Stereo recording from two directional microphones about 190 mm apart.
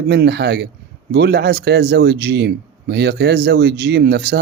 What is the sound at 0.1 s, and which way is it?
A man's voice, 60° right (ahead or behind).